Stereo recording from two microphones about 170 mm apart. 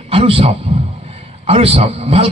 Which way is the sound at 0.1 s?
35° right (ahead or behind).